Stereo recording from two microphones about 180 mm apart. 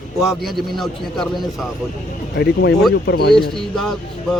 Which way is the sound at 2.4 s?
65° left (ahead or behind).